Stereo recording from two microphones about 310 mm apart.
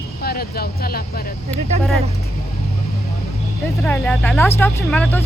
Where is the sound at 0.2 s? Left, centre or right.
Left.